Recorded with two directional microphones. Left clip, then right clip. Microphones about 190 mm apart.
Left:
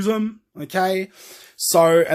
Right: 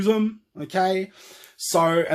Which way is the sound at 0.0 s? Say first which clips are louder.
Right 1 dB; 20° left (ahead or behind).